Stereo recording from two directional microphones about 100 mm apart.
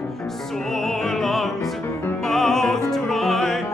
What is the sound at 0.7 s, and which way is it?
Music, 5° left (ahead or behind).